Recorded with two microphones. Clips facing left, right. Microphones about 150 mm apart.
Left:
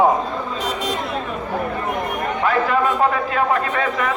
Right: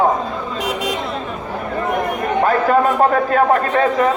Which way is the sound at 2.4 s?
45° right (ahead or behind).